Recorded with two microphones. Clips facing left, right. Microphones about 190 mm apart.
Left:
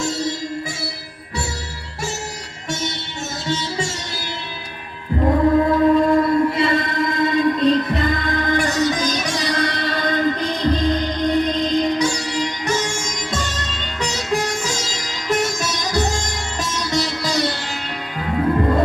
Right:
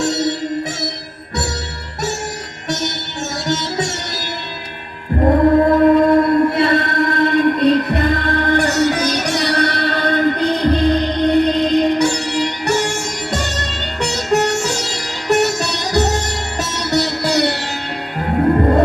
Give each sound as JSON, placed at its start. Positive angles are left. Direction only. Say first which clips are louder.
{"t": 0.0, "sound": "music", "louder": "right 5 dB", "side_deg": -75}
{"t": 3.4, "sound": "music", "louder": "right 3 dB", "side_deg": -70}
{"t": 5.1, "sound": "chant", "louder": "right 4 dB", "side_deg": -55}
{"t": 6.5, "sound": "music", "louder": "right 4 dB", "side_deg": -70}
{"t": 14.3, "sound": "sitar", "louder": "right 7 dB", "side_deg": -70}
{"t": 16.9, "sound": "music", "louder": "right 6 dB", "side_deg": -65}
{"t": 18.3, "sound": "music", "louder": "right 4 dB", "side_deg": -45}